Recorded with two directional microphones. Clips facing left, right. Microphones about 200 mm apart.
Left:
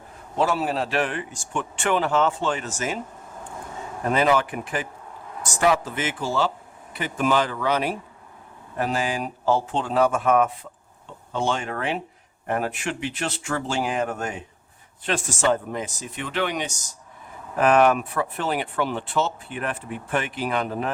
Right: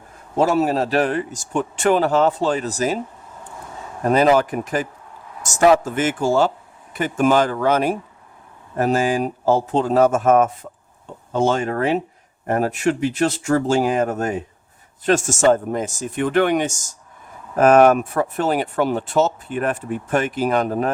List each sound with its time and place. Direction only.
0.3 s speech: 45° right (ahead or behind)
4.0 s speech: 40° right (ahead or behind)